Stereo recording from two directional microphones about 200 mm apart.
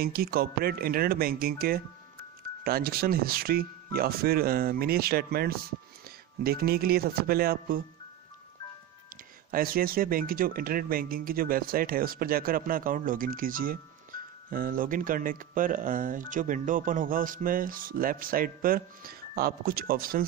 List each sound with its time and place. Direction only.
0.0 s speech: 50° right (ahead or behind)
9.5 s speech: 45° right (ahead or behind)